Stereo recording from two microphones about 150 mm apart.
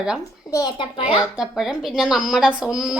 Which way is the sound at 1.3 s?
5° right (ahead or behind).